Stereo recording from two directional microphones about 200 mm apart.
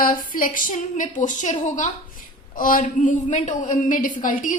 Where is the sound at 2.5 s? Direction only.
45° left (ahead or behind).